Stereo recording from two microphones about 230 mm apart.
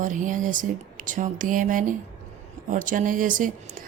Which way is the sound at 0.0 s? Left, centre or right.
Right.